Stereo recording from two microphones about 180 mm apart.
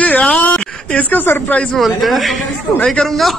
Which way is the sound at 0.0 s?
10° left (ahead or behind).